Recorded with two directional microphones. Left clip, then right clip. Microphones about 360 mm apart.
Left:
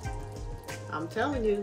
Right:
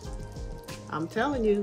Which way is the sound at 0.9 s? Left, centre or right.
Centre.